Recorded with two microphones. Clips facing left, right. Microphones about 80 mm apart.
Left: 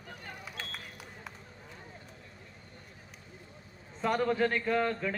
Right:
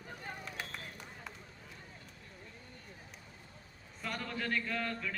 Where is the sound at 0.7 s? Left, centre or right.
Centre.